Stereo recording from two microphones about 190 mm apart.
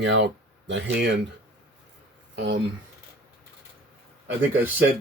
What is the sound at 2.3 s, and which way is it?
Speech, 65° right (ahead or behind).